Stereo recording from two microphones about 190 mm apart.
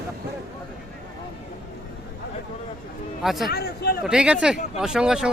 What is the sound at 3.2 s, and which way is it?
Speech, centre (ahead or behind).